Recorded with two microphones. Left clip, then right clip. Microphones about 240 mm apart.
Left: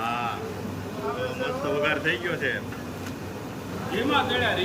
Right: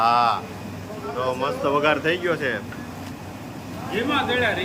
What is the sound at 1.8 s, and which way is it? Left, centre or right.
Speech, centre.